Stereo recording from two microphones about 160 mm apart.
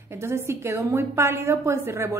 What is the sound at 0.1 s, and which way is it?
A woman's voice, 15° right (ahead or behind).